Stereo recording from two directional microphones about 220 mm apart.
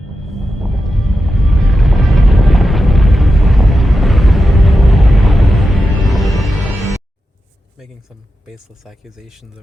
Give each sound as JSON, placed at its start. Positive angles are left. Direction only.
{"t": 0.3, "sound": "music", "side_deg": 0}
{"t": 8.4, "sound": "speech", "side_deg": 0}